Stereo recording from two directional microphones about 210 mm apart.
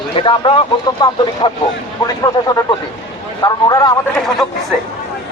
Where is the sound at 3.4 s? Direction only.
20° left (ahead or behind).